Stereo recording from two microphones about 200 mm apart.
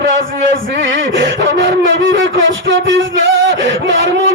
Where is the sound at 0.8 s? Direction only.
65° right (ahead or behind).